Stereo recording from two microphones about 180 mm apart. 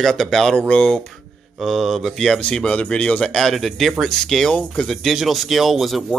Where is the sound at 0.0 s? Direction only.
Centre (ahead or behind).